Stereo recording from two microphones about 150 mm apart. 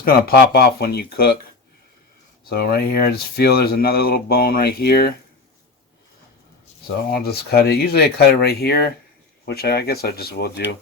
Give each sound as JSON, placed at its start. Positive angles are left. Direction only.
{"t": 0.0, "sound": "speech", "side_deg": 85}
{"t": 2.5, "sound": "speech", "side_deg": 90}
{"t": 7.1, "sound": "speech", "side_deg": 90}